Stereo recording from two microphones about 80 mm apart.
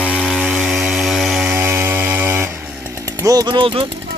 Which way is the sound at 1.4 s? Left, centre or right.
Right.